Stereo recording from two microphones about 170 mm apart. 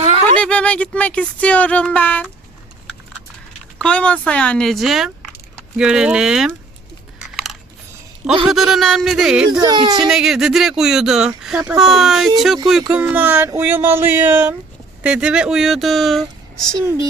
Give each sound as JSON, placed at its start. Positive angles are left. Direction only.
{"t": 0.3, "sound": "speech", "side_deg": 5}
{"t": 3.8, "sound": "speech", "side_deg": 5}
{"t": 8.4, "sound": "speech", "side_deg": 0}
{"t": 9.5, "sound": "speech", "side_deg": -25}
{"t": 10.0, "sound": "speech", "side_deg": -5}
{"t": 12.6, "sound": "a sound", "side_deg": -5}
{"t": 15.0, "sound": "speech", "side_deg": -5}